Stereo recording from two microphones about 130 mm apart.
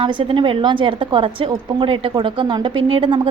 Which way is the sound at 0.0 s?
40° right (ahead or behind).